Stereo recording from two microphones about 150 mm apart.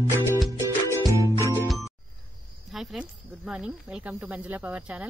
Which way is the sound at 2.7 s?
Centre (ahead or behind).